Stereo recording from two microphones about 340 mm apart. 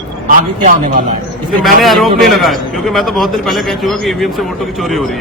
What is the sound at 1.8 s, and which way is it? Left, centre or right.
A man's voice, centre.